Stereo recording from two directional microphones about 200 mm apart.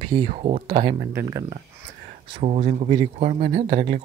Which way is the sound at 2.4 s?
35° right (ahead or behind).